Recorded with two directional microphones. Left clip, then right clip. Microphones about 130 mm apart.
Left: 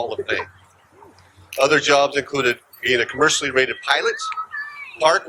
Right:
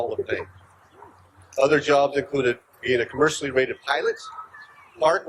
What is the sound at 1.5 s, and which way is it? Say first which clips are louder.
Speech: left 3 dB; 20° left (ahead or behind).